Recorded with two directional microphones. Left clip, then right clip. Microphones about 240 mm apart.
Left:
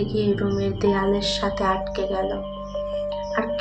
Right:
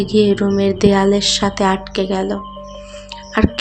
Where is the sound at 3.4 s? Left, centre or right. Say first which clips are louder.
Right 9 dB; right.